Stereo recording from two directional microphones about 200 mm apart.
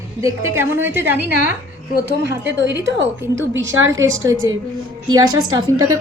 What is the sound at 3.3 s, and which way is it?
Speech, 65° right (ahead or behind).